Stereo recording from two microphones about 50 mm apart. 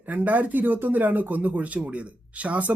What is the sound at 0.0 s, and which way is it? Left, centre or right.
Speech, right.